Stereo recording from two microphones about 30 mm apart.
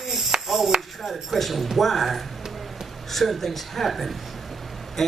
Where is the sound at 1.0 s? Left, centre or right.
Centre.